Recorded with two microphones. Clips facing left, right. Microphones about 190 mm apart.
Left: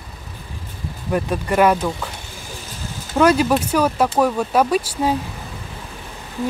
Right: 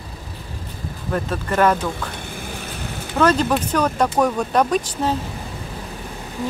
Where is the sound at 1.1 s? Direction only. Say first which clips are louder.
Left 3 dB; 15° left (ahead or behind).